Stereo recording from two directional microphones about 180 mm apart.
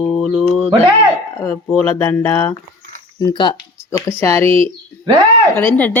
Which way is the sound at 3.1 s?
25° left (ahead or behind).